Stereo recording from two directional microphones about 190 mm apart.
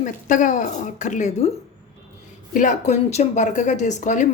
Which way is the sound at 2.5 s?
40° left (ahead or behind).